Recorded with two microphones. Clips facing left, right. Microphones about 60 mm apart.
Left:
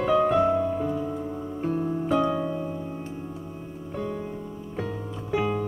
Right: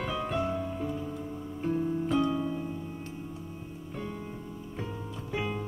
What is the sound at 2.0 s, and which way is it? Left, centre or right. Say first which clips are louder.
Music: left 6 dB; left.